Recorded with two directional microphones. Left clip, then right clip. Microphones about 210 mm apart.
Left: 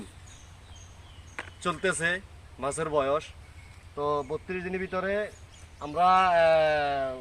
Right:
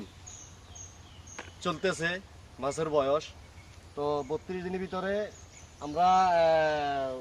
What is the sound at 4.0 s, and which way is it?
Speech, 20° left (ahead or behind).